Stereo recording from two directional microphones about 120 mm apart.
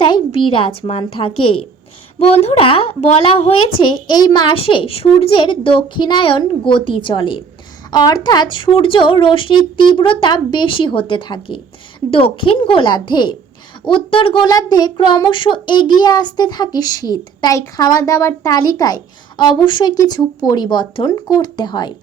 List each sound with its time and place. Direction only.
0.0 s a woman's voice: 45° left (ahead or behind)
14.4 s speech: 35° left (ahead or behind)